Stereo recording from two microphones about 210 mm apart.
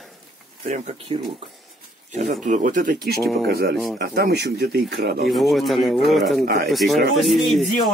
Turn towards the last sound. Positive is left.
turn(degrees=0)  # may be behind; listen again after turning